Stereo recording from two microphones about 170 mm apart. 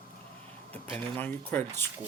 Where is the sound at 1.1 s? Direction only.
10° left (ahead or behind).